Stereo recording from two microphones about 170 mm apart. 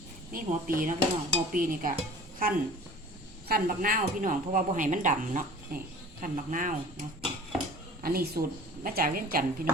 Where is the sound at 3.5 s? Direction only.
60° right (ahead or behind).